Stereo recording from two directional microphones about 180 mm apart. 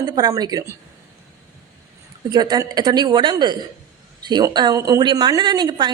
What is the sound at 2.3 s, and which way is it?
A woman's voice, 20° right (ahead or behind).